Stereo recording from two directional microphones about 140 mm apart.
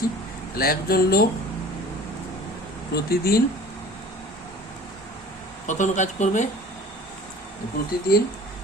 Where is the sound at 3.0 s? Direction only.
90° left.